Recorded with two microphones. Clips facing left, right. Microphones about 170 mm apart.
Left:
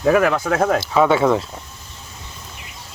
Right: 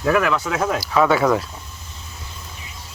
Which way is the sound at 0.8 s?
25° left (ahead or behind).